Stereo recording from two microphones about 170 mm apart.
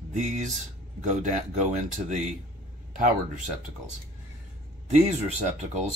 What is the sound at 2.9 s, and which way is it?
Speech, 55° right (ahead or behind).